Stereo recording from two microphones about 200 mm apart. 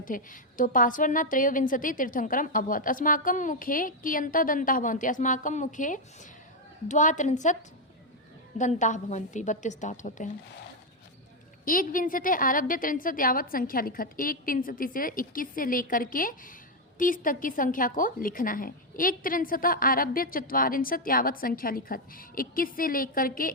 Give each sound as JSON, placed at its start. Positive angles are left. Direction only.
{"t": 0.0, "sound": "a woman's voice", "side_deg": 40}
{"t": 8.5, "sound": "a woman's voice", "side_deg": 40}
{"t": 11.6, "sound": "a woman's voice", "side_deg": 45}